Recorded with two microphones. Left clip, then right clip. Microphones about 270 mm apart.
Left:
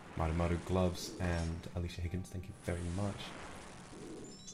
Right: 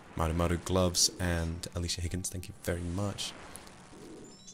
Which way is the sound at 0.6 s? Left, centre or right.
Right.